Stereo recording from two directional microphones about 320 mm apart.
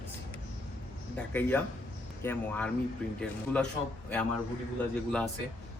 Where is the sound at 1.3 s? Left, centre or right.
Centre.